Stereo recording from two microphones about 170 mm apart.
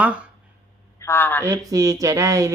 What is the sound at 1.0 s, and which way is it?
Speech, 15° left (ahead or behind).